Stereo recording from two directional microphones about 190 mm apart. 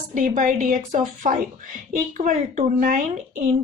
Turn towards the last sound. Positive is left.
turn(degrees=-45)  # may be behind; listen again after turning